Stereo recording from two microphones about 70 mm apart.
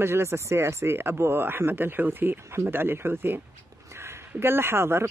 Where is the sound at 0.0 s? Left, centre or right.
Right.